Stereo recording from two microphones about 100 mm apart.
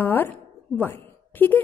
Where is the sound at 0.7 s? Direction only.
20° left (ahead or behind).